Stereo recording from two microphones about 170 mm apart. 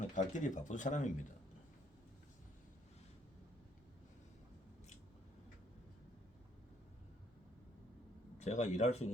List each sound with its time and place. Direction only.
0.1 s speech: 50° left (ahead or behind)
8.4 s speech: 45° left (ahead or behind)